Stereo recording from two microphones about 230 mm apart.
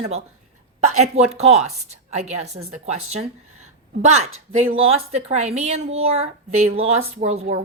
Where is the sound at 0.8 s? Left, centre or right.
Right.